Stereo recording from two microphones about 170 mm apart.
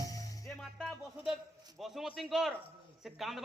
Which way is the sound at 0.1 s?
20° left (ahead or behind).